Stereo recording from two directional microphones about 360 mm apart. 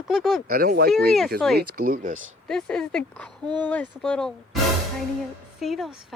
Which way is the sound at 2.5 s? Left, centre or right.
Centre.